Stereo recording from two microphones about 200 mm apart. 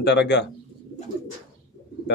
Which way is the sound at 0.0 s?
60° left (ahead or behind).